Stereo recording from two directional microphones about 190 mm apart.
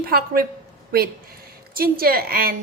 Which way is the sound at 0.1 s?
50° right (ahead or behind).